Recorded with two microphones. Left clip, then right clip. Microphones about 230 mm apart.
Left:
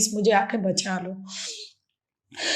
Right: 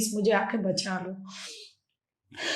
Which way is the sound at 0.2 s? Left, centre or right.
Left.